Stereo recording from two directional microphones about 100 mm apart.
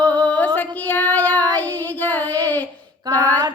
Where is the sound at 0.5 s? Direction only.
15° left (ahead or behind).